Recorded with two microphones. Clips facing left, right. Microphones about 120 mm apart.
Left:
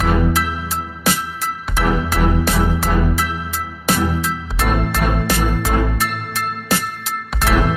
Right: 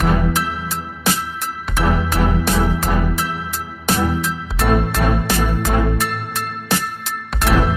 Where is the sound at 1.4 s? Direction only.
Centre (ahead or behind).